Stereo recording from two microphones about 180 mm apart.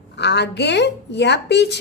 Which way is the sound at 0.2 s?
70° left (ahead or behind).